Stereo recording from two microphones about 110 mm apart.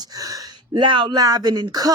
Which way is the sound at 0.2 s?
30° right (ahead or behind).